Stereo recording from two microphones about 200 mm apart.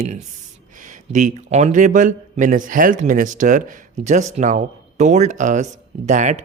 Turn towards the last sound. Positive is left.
turn(degrees=-35)  # may be behind; listen again after turning